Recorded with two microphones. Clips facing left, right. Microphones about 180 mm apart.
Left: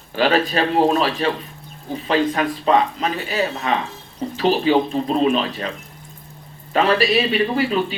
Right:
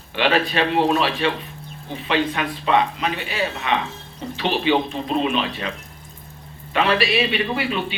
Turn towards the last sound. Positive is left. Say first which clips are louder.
# left 5 dB
turn(degrees=40)  # may be behind; listen again after turning